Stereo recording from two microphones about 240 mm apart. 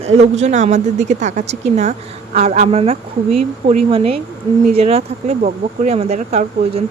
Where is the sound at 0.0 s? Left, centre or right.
Right.